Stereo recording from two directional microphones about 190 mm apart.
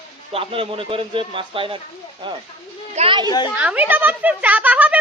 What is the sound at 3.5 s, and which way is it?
Speech, 5° right (ahead or behind).